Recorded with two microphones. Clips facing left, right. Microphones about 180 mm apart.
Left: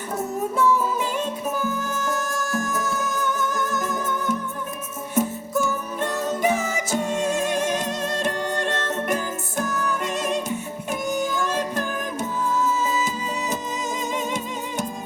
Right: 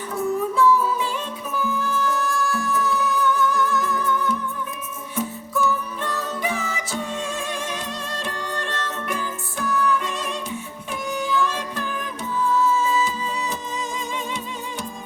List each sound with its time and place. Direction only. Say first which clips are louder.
0.5 s music: right 1 dB; 45° left (ahead or behind)